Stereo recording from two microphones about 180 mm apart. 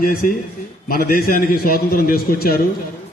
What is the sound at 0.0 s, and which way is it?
A man's voice, 50° left (ahead or behind).